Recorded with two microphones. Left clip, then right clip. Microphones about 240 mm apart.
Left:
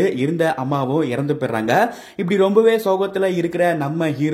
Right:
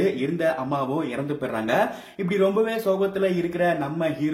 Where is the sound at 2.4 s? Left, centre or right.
Left.